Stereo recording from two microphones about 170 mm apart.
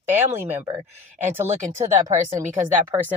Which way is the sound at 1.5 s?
40° right (ahead or behind).